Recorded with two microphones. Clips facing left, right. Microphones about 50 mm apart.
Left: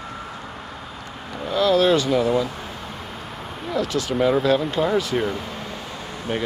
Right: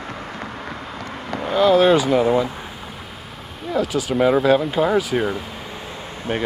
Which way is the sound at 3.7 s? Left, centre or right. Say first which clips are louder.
Right 3 dB; centre.